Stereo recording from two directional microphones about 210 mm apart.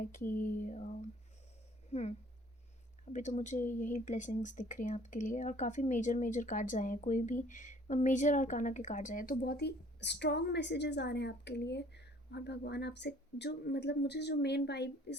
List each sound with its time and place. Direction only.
0.0 s speech: 40° left (ahead or behind)